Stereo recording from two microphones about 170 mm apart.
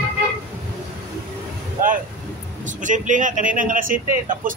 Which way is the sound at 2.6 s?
50° right (ahead or behind).